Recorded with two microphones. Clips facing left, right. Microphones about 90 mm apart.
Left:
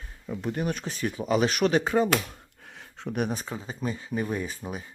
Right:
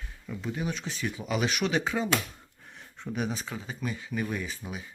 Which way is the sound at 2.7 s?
90° left.